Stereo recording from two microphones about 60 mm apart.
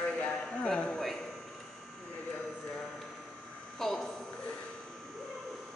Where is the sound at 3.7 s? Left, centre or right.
Centre.